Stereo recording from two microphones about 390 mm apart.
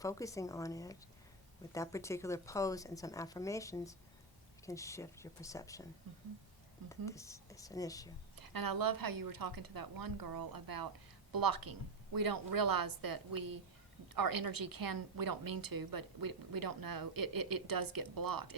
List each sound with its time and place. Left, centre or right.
0.0 s speech: centre
6.8 s speech: centre
8.4 s a woman's voice: right